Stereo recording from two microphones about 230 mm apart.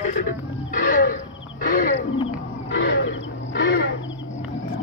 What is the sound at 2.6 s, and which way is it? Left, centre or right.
Wild animals, left.